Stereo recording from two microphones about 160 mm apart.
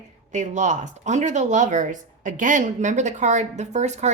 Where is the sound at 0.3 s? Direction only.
50° right (ahead or behind).